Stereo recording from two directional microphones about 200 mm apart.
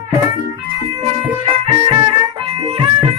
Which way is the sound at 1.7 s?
25° right (ahead or behind).